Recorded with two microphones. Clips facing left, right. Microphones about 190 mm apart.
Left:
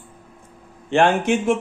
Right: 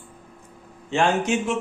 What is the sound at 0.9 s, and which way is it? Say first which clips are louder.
Speech: left 4 dB; 55° left (ahead or behind).